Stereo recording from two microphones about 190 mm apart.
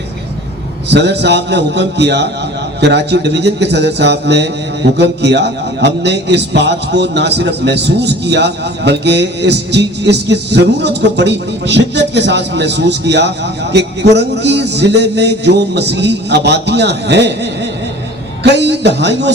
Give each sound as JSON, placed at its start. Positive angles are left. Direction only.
{"t": 0.9, "sound": "a man's voice", "side_deg": -65}